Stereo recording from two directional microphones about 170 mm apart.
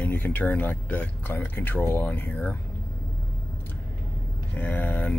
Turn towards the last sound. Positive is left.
turn(degrees=10)  # may be behind; listen again after turning